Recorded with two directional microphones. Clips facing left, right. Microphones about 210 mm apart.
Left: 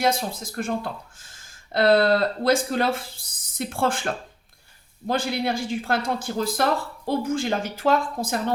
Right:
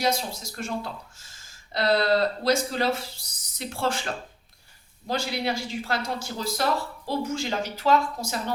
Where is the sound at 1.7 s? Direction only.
55° left (ahead or behind).